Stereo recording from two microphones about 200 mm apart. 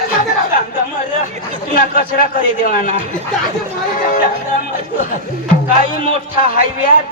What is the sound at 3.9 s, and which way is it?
Speech, 40° left (ahead or behind).